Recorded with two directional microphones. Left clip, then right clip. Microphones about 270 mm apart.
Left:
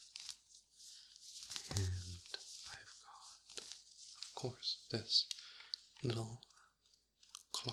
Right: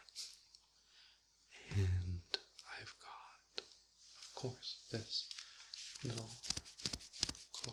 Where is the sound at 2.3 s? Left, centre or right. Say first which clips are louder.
Right 6 dB; centre.